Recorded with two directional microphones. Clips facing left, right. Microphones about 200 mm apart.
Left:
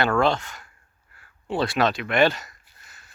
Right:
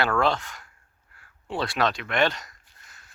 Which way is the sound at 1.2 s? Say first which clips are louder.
Left 4 dB; centre (ahead or behind).